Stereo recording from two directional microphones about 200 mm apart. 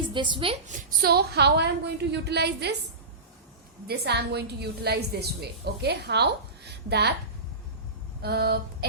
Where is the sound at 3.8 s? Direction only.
55° right (ahead or behind).